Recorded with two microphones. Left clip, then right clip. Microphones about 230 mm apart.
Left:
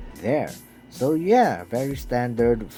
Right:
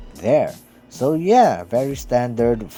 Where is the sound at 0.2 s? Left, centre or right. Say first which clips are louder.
Right 7 dB; right.